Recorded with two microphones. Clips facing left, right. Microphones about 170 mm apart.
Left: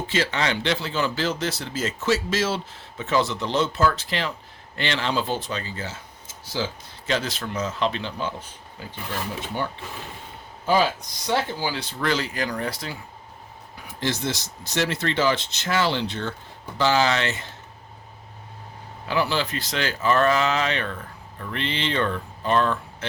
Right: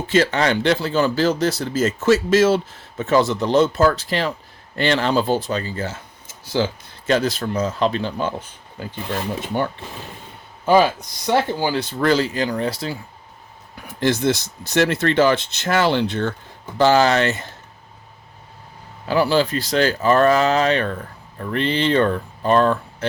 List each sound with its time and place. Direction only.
0.1 s speech: 45° right (ahead or behind)
7.1 s speech: 40° right (ahead or behind)
8.8 s speech: 60° right (ahead or behind)
11.3 s speech: 55° right (ahead or behind)
12.2 s speech: 30° right (ahead or behind)
14.0 s speech: 55° right (ahead or behind)
19.0 s speech: 35° right (ahead or behind)